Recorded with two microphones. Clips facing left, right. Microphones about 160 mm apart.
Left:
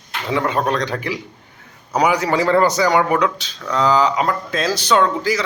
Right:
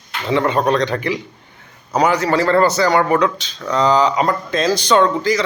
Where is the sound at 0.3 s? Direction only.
5° left (ahead or behind).